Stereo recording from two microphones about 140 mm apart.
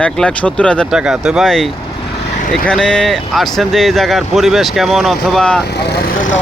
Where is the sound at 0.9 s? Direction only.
5° right (ahead or behind).